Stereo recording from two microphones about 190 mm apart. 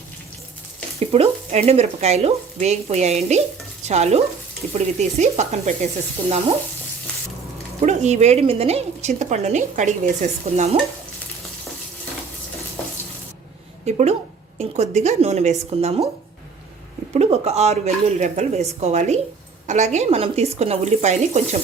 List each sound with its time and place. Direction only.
0.9 s speech: 30° right (ahead or behind)
7.8 s speech: 40° right (ahead or behind)
13.8 s speech: 35° right (ahead or behind)
17.2 s speech: 35° right (ahead or behind)